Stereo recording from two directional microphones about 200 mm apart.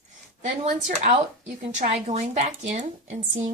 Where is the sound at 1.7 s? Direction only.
35° right (ahead or behind).